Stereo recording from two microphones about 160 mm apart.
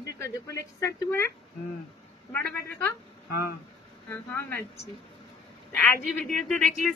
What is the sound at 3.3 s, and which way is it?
Speech, 65° left (ahead or behind).